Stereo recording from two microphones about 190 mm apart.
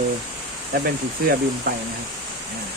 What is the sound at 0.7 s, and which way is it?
Speech, 55° right (ahead or behind).